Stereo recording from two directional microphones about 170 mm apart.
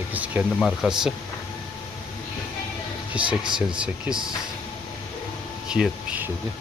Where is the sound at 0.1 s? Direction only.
10° right (ahead or behind).